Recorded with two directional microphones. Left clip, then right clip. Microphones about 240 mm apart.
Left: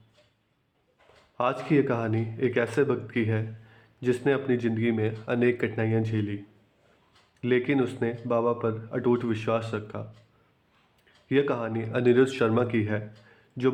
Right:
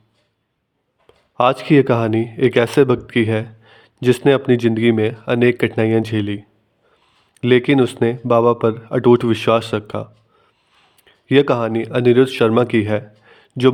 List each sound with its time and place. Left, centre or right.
1.4 s a man's voice: right
7.4 s a man's voice: right